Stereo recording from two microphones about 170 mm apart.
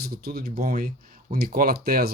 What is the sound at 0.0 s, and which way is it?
Speech, 65° right (ahead or behind).